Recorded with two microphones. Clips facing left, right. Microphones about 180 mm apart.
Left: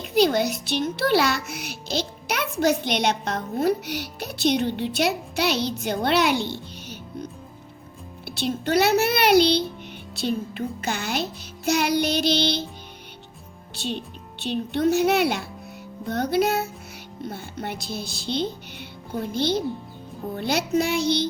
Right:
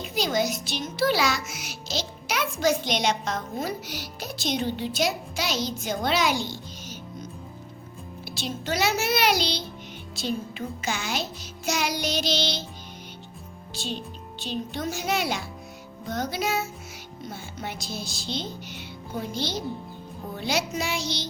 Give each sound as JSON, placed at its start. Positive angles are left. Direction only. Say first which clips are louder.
{"t": 0.0, "sound": "a child's voice", "louder": "left 6 dB", "side_deg": 55}
{"t": 13.8, "sound": "a child's voice", "louder": "left 4 dB", "side_deg": 60}